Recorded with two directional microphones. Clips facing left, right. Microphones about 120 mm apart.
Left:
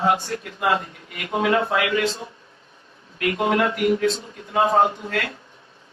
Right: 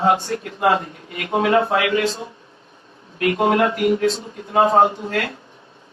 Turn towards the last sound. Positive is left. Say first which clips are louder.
# right 3 dB
turn(degrees=-30)  # may be behind; listen again after turning